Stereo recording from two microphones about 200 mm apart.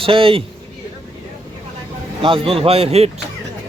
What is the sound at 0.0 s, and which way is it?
Speech, 25° right (ahead or behind).